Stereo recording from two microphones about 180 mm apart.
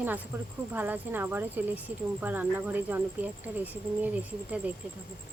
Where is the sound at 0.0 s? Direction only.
10° right (ahead or behind).